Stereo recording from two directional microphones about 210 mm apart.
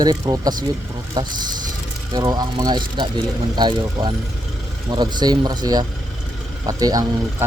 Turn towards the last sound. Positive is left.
turn(degrees=-15)  # may be behind; listen again after turning